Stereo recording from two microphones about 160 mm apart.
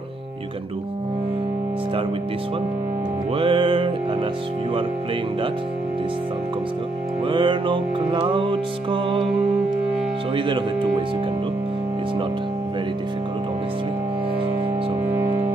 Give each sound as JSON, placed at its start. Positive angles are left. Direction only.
{"t": 3.3, "sound": "music", "side_deg": -35}
{"t": 7.2, "sound": "music", "side_deg": -30}